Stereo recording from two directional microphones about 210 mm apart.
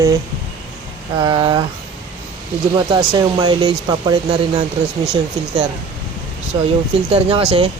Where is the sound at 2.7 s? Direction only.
20° right (ahead or behind).